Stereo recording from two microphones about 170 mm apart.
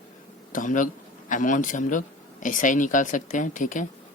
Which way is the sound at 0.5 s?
50° left (ahead or behind).